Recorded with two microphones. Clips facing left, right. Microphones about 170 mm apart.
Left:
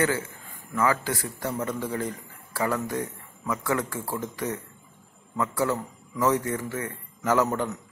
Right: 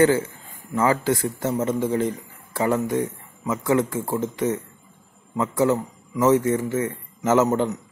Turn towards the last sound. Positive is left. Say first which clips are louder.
# right 5 dB
turn(degrees=-20)  # may be behind; listen again after turning